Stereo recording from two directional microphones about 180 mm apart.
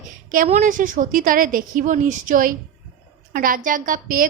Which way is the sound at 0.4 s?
45° right (ahead or behind).